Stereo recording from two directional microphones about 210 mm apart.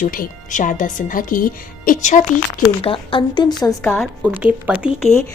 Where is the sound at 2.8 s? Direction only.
25° left (ahead or behind).